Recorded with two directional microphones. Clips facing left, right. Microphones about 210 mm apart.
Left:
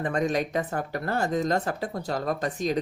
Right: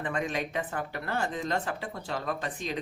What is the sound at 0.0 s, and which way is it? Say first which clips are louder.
Speech: left 6 dB; 40° left (ahead or behind).